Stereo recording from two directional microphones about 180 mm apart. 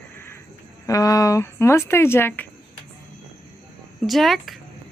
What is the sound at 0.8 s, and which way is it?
Speech, 20° left (ahead or behind).